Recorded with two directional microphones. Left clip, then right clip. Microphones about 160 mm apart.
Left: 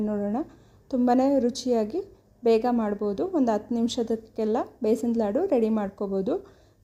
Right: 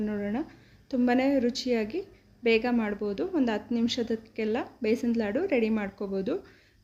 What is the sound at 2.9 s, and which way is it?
A woman's voice, 30° left (ahead or behind).